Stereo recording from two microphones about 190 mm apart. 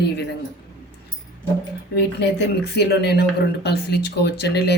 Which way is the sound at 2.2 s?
60° left (ahead or behind).